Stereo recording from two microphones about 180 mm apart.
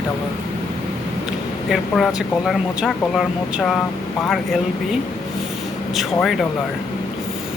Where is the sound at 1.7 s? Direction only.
Centre (ahead or behind).